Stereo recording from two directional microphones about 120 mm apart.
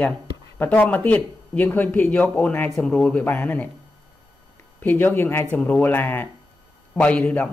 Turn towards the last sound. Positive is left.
turn(degrees=10)  # may be behind; listen again after turning